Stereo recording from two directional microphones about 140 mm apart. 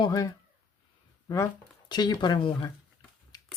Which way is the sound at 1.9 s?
30° left (ahead or behind).